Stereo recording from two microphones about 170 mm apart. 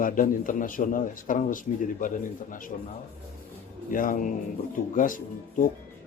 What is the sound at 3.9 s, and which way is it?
A man's voice, 50° left (ahead or behind).